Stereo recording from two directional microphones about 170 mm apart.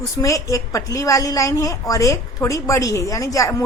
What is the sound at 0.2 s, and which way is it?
A woman's voice, 20° left (ahead or behind).